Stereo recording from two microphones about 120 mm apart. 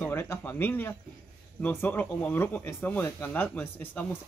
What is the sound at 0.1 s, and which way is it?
Speech, 20° left (ahead or behind).